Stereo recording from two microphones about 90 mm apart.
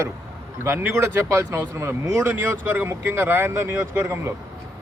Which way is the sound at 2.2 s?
15° right (ahead or behind).